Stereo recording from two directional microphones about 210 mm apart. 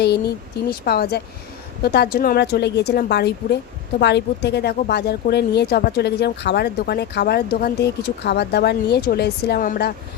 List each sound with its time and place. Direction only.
0.0 s speech: 50° left (ahead or behind)